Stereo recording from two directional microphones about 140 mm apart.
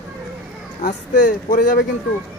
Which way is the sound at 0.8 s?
70° left (ahead or behind).